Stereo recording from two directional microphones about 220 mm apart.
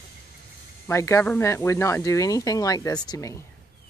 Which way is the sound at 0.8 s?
10° left (ahead or behind).